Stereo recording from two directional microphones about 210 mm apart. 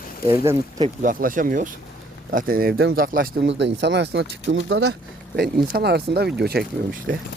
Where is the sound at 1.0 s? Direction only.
40° right (ahead or behind); by 4.9 s 65° right (ahead or behind).